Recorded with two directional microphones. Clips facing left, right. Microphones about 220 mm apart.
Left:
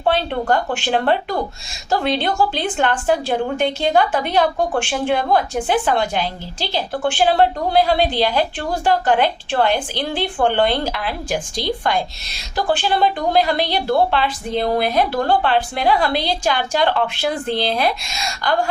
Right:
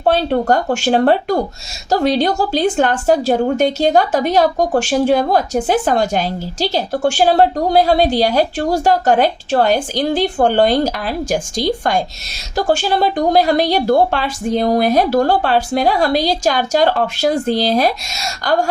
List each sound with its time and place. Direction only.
0.0 s a woman's voice: 40° right (ahead or behind)